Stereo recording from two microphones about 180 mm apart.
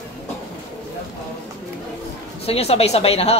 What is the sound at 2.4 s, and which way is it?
Speech, 35° left (ahead or behind).